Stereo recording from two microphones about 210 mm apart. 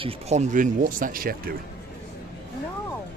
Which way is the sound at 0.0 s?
30° right (ahead or behind).